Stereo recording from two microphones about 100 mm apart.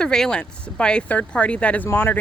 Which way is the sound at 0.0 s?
5° left (ahead or behind).